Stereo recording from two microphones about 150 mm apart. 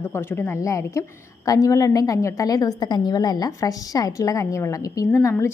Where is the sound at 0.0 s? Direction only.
15° left (ahead or behind).